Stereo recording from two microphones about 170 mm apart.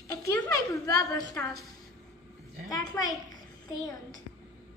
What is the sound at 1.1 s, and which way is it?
Speech, 20° left (ahead or behind).